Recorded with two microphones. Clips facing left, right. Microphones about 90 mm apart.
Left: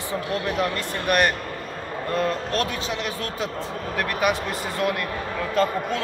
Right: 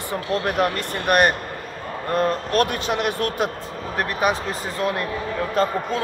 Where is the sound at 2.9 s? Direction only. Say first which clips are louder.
Right 6 dB; 55° right (ahead or behind).